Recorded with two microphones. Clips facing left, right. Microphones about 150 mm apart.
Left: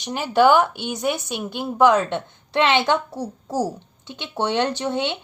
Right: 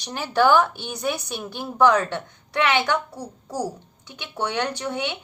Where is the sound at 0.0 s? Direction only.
20° left (ahead or behind).